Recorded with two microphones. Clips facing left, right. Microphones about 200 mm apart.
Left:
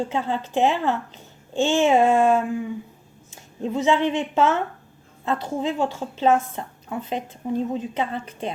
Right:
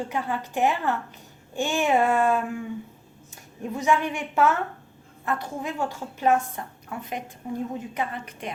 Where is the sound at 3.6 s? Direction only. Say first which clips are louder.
Left 4 dB; 20° left (ahead or behind).